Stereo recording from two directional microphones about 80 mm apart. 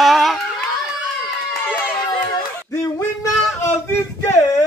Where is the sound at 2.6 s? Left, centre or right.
Left.